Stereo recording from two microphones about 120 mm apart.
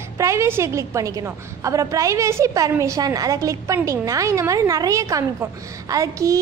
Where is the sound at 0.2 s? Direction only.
25° right (ahead or behind).